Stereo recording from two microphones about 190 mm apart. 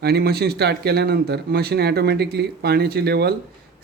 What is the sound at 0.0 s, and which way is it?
Speech, 55° right (ahead or behind).